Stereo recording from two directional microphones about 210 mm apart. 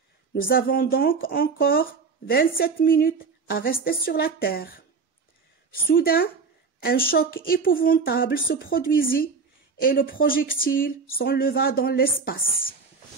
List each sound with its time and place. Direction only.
0.3 s speech: 45° left (ahead or behind)
5.9 s speech: 45° left (ahead or behind)